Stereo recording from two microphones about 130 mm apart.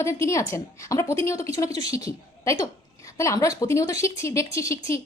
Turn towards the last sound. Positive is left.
turn(degrees=20)  # may be behind; listen again after turning